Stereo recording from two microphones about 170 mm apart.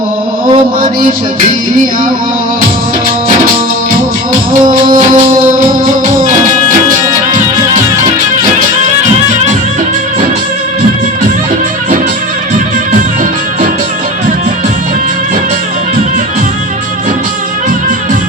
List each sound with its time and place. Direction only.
4.9 s music: 55° right (ahead or behind)